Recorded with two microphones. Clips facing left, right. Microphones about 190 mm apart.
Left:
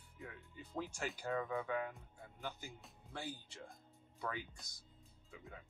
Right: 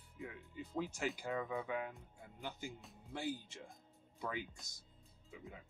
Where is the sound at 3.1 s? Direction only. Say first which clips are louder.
Right 5 dB; 15° right (ahead or behind).